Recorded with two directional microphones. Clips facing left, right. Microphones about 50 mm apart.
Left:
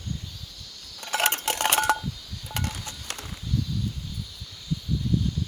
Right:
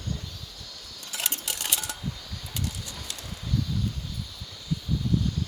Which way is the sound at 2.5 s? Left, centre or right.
Left.